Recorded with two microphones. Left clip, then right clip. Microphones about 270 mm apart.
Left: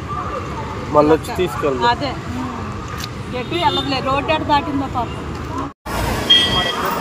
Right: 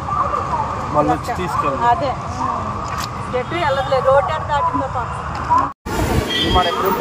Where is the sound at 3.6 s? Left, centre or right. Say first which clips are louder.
Right 2 dB; left.